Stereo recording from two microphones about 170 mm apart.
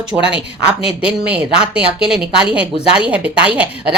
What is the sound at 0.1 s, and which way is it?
A woman's voice, 10° right (ahead or behind).